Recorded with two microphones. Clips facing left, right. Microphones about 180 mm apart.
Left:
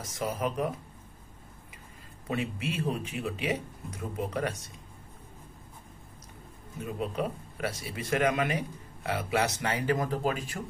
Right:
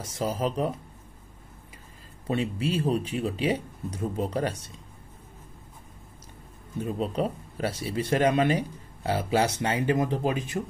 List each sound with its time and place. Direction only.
0.0 s speech: 30° right (ahead or behind)
2.2 s speech: 30° right (ahead or behind)
6.8 s speech: 30° right (ahead or behind)